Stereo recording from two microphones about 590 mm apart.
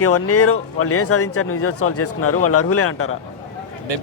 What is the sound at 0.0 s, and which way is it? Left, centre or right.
Speech, left.